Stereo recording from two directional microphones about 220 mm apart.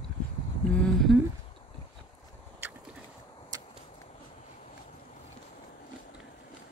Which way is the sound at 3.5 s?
15° right (ahead or behind).